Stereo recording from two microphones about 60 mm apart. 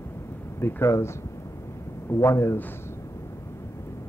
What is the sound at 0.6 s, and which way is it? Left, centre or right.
Speech, left.